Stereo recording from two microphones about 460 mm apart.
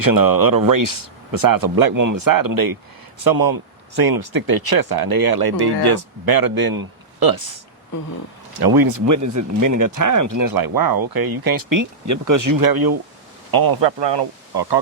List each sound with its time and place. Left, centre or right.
0.0 s speech: right
8.6 s speech: right